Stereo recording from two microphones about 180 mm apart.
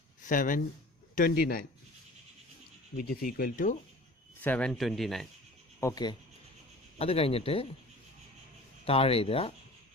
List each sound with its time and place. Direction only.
0.3 s speech: 50° left (ahead or behind)
3.0 s speech: 55° left (ahead or behind)
4.4 s speech: 5° left (ahead or behind)
5.8 s speech: 20° left (ahead or behind)
7.0 s speech: 30° left (ahead or behind)
8.8 s speech: 30° left (ahead or behind)